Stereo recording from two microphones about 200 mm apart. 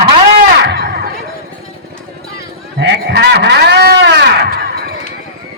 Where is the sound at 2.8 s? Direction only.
60° right (ahead or behind).